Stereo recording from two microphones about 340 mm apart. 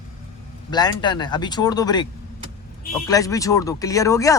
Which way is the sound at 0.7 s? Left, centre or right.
Centre.